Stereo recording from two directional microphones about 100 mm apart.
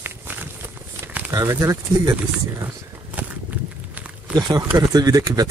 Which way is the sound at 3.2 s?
15° right (ahead or behind).